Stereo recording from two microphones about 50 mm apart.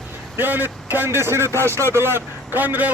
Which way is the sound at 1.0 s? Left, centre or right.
Right.